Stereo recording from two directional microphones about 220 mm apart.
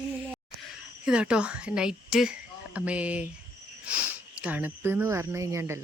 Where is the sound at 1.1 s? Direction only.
5° right (ahead or behind).